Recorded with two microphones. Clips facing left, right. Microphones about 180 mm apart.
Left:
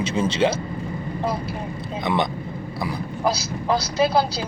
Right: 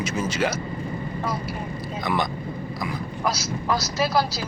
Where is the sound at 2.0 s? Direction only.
25° left (ahead or behind).